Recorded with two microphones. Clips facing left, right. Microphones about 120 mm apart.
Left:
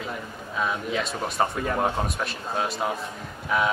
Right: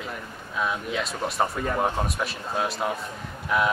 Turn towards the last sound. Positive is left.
turn(degrees=0)  # may be behind; listen again after turning